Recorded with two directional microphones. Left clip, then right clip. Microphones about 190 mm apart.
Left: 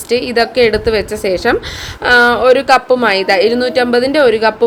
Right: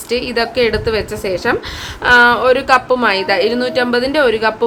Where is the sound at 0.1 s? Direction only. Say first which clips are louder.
Left 4 dB; 15° left (ahead or behind).